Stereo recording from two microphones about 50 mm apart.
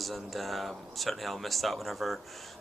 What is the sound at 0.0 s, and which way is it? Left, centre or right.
Speech, centre.